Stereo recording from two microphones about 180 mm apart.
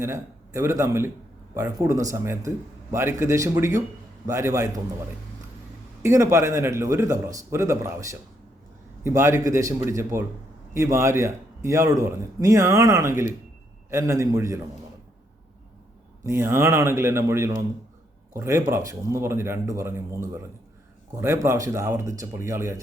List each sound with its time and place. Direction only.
0.0 s a man's voice: 15° right (ahead or behind)
6.0 s a man's voice: 15° right (ahead or behind)
16.2 s a man's voice: 15° right (ahead or behind)